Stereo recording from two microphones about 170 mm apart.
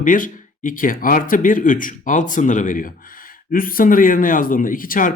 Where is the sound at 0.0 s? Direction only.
50° left (ahead or behind).